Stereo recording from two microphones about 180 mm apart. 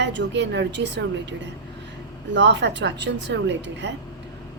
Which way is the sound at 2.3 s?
75° right (ahead or behind).